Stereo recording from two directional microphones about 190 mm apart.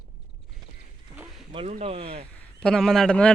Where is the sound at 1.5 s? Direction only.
30° right (ahead or behind).